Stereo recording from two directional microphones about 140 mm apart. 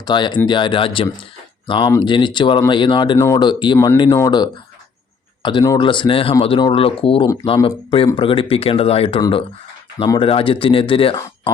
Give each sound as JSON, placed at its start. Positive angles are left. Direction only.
{"t": 0.0, "sound": "speech", "side_deg": 30}
{"t": 3.2, "sound": "speech", "side_deg": 20}
{"t": 3.4, "sound": "speech", "side_deg": 35}